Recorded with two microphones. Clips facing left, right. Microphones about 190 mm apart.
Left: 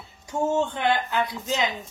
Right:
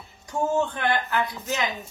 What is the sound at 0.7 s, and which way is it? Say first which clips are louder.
Speech: left 1 dB; 20° left (ahead or behind).